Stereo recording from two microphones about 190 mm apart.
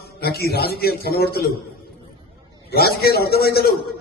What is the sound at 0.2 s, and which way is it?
A man's voice, 55° left (ahead or behind).